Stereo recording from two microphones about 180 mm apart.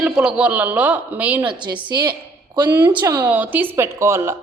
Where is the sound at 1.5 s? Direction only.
25° right (ahead or behind).